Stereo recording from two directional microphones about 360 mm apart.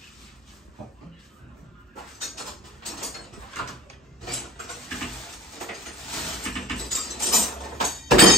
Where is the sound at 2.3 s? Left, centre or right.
Centre.